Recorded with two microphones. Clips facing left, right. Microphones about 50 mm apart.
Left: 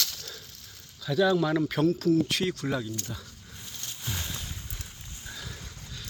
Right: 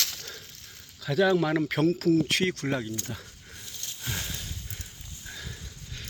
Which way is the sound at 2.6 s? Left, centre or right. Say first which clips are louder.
Right 1 dB; right.